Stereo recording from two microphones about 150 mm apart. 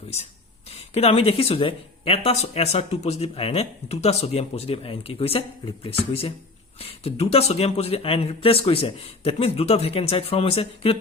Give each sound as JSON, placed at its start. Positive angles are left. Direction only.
{"t": 0.7, "sound": "speech", "side_deg": 45}